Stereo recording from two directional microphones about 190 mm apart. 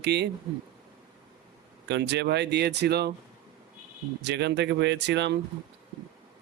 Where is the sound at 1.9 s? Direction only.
65° right (ahead or behind).